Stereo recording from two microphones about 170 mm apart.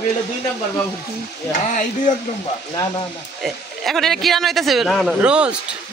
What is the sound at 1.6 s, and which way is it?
Speech, 50° left (ahead or behind).